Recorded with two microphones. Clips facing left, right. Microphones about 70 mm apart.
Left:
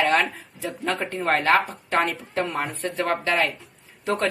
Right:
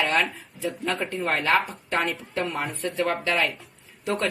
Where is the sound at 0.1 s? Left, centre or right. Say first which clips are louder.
Left 3 dB; left.